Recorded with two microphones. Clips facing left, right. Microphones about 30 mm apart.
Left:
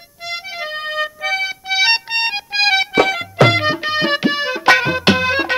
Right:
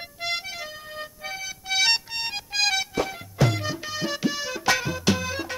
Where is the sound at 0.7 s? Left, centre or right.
Left.